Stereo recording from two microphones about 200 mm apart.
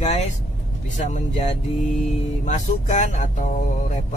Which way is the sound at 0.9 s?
35° left (ahead or behind).